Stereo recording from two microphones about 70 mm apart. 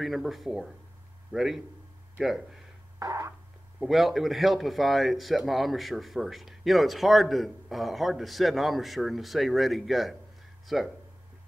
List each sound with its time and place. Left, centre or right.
0.0 s speech: centre
3.0 s a sound: right
3.8 s speech: centre